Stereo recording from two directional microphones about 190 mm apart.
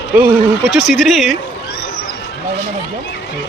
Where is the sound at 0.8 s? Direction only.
Centre (ahead or behind).